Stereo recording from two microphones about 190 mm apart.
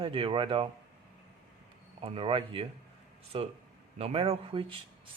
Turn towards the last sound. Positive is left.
turn(degrees=-30)  # may be behind; listen again after turning